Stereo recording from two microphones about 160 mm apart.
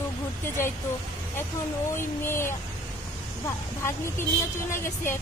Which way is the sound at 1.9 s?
15° left (ahead or behind).